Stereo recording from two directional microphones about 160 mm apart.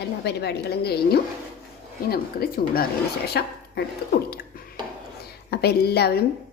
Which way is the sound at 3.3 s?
90° left.